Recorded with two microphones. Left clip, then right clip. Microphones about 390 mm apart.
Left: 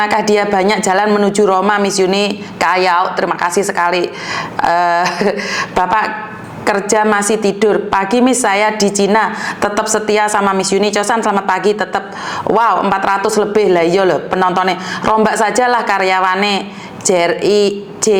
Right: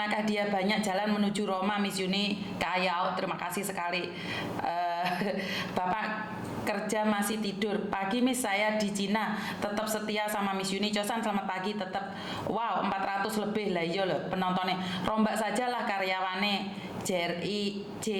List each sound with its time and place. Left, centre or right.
0.3 s a woman's voice: left